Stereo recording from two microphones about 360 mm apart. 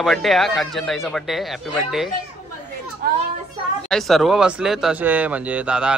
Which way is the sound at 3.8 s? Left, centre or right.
Centre.